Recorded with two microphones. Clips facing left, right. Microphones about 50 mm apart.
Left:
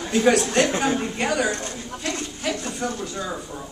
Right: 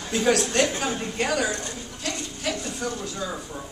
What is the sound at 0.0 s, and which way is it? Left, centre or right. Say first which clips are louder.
Speech: left 4 dB; centre.